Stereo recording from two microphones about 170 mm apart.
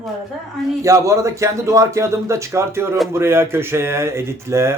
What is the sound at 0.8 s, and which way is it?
Speech, 20° right (ahead or behind).